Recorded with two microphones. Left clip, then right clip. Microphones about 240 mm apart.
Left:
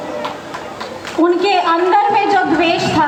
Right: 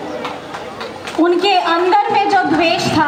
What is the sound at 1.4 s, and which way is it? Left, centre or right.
A woman's voice, right.